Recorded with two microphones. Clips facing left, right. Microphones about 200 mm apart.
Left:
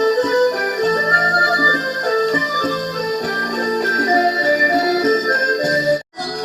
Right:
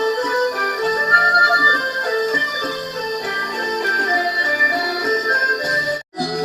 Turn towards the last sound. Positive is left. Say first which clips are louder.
# left 6 dB
turn(degrees=25)  # may be behind; listen again after turning